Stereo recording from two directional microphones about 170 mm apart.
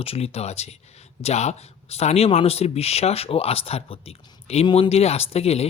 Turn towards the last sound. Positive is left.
turn(degrees=35)  # may be behind; listen again after turning